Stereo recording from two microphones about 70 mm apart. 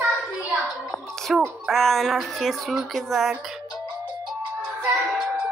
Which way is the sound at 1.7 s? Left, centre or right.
Centre.